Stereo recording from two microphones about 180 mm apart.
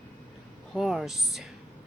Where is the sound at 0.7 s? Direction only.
Centre (ahead or behind).